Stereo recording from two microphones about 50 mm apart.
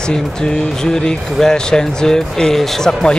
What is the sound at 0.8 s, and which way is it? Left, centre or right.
Speech, centre.